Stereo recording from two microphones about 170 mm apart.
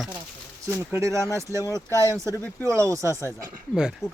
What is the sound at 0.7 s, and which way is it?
Speech, 15° right (ahead or behind).